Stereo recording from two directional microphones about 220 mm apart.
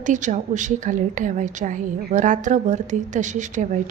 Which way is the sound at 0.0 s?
35° right (ahead or behind).